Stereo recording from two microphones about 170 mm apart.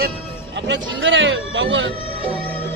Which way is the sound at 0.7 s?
90° right.